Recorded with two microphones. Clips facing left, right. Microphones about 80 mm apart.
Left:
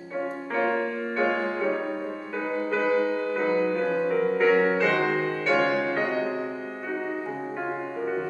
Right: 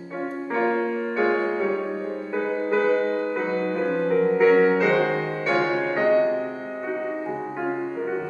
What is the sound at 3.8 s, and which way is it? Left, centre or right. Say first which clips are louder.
Music: right 3 dB; centre.